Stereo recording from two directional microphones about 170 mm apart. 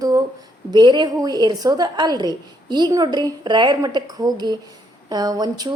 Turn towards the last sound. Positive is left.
turn(degrees=-20)  # may be behind; listen again after turning